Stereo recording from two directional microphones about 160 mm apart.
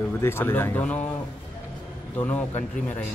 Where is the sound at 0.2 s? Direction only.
15° left (ahead or behind).